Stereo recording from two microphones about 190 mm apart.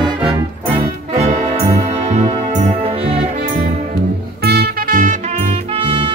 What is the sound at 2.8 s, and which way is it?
Music, 30° right (ahead or behind).